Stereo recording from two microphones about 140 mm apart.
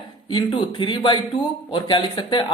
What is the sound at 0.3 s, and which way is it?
Speech, 35° left (ahead or behind).